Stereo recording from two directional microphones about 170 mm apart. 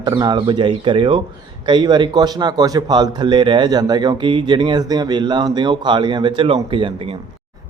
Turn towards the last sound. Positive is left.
turn(degrees=-30)  # may be behind; listen again after turning